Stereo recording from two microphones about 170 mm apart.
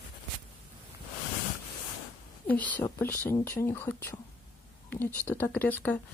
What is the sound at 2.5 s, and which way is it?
Speech, 10° left (ahead or behind).